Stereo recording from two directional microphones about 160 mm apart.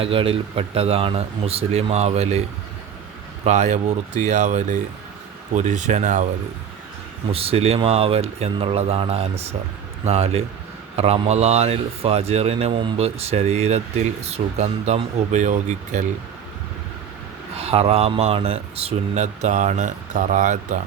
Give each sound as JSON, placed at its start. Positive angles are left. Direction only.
{"t": 0.0, "sound": "a man's voice", "side_deg": -35}
{"t": 3.4, "sound": "speech", "side_deg": -45}
{"t": 7.3, "sound": "a man's voice", "side_deg": -35}
{"t": 17.6, "sound": "speech", "side_deg": -40}